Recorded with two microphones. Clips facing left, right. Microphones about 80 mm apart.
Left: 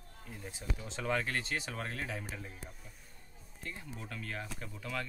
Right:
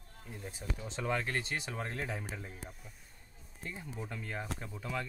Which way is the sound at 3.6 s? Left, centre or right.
Centre.